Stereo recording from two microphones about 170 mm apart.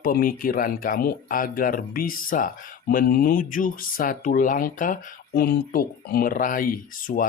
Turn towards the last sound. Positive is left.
turn(degrees=55)  # may be behind; listen again after turning